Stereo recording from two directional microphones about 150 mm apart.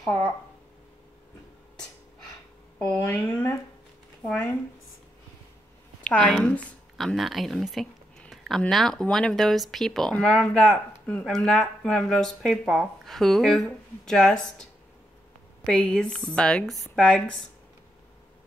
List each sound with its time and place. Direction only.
0.0 s speech: 10° left (ahead or behind)
2.8 s speech: 10° left (ahead or behind)
6.0 s a woman's voice: 5° left (ahead or behind)